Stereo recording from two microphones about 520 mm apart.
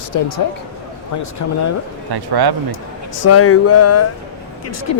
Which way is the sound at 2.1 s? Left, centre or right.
Right.